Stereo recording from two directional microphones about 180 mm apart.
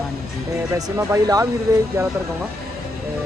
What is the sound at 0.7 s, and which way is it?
Speech, 20° right (ahead or behind).